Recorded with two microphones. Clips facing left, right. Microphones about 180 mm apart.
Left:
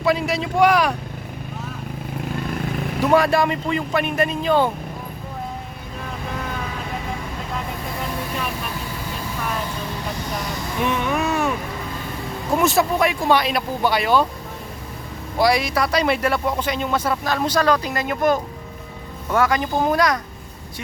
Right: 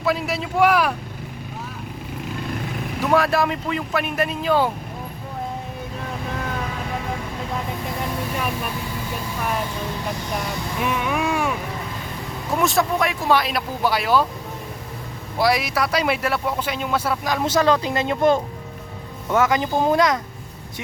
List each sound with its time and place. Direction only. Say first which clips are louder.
0.0 s speech: left 3 dB; centre (ahead or behind)
3.0 s speech: left 2 dB; centre (ahead or behind)
10.8 s speech: left 2 dB; 5° right (ahead or behind)
12.5 s speech: left 2 dB; centre (ahead or behind)
15.4 s speech: left 2 dB; 5° right (ahead or behind); by 20.1 s 20° right (ahead or behind)